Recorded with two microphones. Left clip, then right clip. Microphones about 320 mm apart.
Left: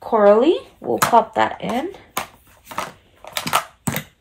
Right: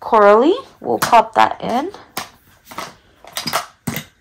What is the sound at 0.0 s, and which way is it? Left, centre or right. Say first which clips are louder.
Speech: right 3 dB; right.